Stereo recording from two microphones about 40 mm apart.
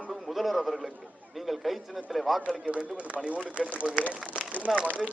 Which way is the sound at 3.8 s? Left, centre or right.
Centre.